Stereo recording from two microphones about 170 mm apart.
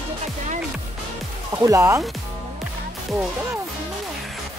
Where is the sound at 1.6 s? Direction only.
15° right (ahead or behind).